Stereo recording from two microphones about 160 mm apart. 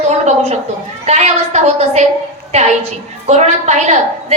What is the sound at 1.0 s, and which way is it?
A woman's voice, 45° right (ahead or behind).